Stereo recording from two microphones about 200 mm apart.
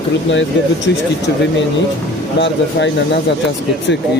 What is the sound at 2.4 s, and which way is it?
Speech, 60° left (ahead or behind).